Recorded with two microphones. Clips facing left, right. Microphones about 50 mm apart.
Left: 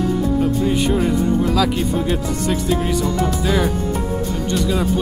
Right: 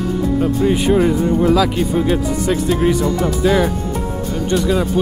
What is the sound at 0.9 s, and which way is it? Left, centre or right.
Speech, centre.